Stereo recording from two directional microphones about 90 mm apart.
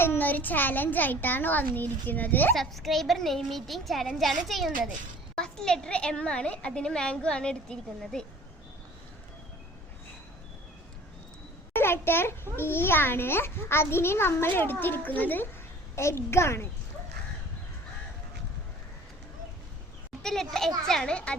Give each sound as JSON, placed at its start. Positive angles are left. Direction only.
{"t": 0.0, "sound": "a child's voice", "side_deg": 25}
{"t": 2.6, "sound": "a woman's voice", "side_deg": 0}
{"t": 11.7, "sound": "a child's voice", "side_deg": 25}
{"t": 20.2, "sound": "a woman's voice", "side_deg": 5}